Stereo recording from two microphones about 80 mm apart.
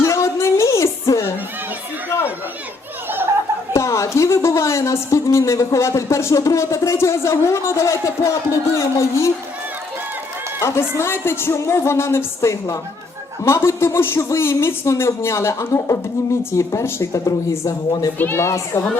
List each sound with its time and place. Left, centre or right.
0.0 s music: left
2.0 s a sound: left
3.7 s a woman's voice: left
10.6 s a woman's voice: left
18.2 s a woman's voice: left